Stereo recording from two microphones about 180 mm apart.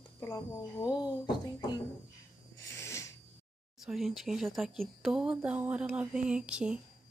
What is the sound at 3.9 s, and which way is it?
Speech, centre (ahead or behind).